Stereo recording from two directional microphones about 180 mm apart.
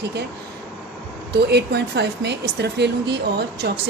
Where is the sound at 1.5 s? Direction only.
65° right (ahead or behind).